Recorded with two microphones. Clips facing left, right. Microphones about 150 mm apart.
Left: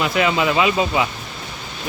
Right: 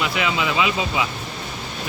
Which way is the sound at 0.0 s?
45° left (ahead or behind).